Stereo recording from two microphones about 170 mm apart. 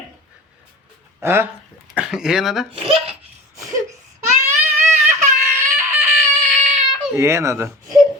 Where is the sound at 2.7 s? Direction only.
35° right (ahead or behind).